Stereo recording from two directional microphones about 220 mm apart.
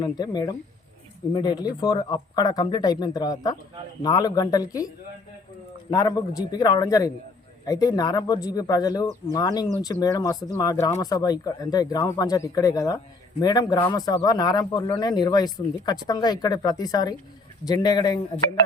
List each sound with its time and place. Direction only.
0.0 s speech: 20° left (ahead or behind)
5.9 s speech: 15° left (ahead or behind)